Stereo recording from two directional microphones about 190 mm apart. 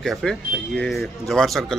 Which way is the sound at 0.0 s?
Centre (ahead or behind).